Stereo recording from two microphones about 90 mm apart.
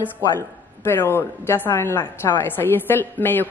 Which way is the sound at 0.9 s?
25° left (ahead or behind).